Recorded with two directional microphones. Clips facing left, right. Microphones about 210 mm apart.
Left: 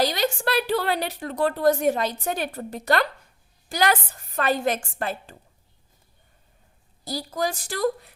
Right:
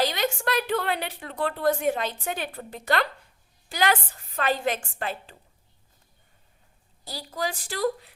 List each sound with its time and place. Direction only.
0.0 s a woman's voice: 35° left (ahead or behind)
7.0 s a woman's voice: 40° left (ahead or behind)